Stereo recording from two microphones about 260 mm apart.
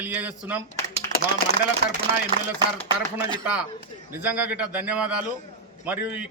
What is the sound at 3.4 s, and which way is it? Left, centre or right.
A man's voice, centre.